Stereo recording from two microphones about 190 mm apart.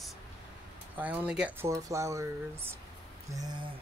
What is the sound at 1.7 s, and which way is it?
Speech, 15° right (ahead or behind).